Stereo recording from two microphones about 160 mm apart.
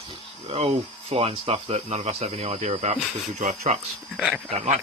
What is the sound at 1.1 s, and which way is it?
Speech, 40° right (ahead or behind).